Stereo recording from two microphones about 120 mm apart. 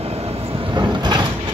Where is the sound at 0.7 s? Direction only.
40° right (ahead or behind).